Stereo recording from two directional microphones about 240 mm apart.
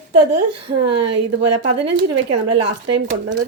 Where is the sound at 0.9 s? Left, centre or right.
Right.